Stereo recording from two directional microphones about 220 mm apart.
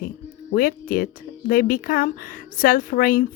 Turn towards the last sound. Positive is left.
turn(degrees=40)  # may be behind; listen again after turning